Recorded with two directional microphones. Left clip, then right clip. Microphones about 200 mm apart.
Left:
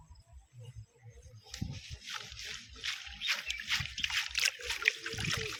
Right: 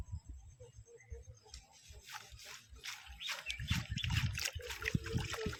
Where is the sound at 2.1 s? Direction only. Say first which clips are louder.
Left 8 dB; 40° right (ahead or behind).